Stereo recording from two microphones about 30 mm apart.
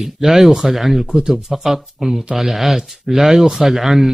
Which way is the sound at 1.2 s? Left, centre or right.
Right.